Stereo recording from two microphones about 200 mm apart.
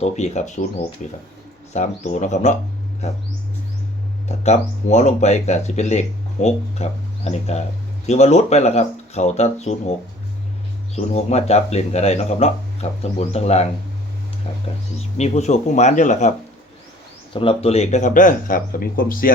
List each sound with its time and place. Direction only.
0.0 s speech: 35° left (ahead or behind)
4.4 s speech: 35° left (ahead or behind)
10.9 s speech: 30° left (ahead or behind)
14.9 s speech: 35° left (ahead or behind)
17.3 s speech: 30° left (ahead or behind); by 19.3 s 45° left (ahead or behind)